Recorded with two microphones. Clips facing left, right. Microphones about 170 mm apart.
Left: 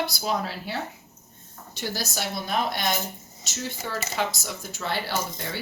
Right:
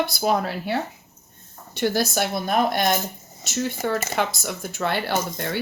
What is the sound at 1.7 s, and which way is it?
Speech, 60° right (ahead or behind).